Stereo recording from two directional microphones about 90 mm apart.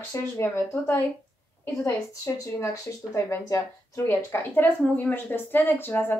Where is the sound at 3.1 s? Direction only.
35° left (ahead or behind).